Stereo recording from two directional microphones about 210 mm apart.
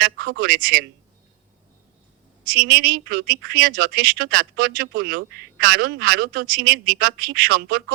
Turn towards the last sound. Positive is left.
turn(degrees=-45)  # may be behind; listen again after turning